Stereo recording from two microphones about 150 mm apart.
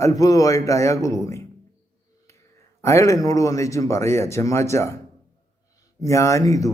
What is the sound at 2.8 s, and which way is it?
Speech, 20° left (ahead or behind).